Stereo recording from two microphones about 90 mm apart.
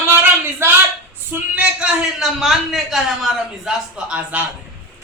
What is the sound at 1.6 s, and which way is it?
Speech, 15° right (ahead or behind).